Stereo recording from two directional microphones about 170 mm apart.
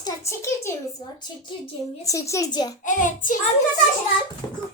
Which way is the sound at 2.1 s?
20° left (ahead or behind).